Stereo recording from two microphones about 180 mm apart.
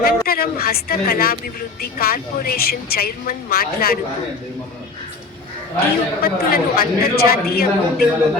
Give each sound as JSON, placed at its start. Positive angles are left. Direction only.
{"t": 0.0, "sound": "a man's voice", "side_deg": 55}
{"t": 5.8, "sound": "a man's voice", "side_deg": 55}